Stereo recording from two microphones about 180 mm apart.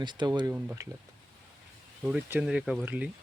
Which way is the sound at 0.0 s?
25° right (ahead or behind).